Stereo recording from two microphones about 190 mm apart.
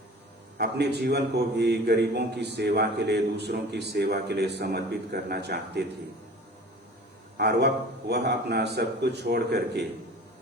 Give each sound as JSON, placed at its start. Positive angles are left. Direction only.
{"t": 0.6, "sound": "a man's voice", "side_deg": -60}
{"t": 7.3, "sound": "a man's voice", "side_deg": -60}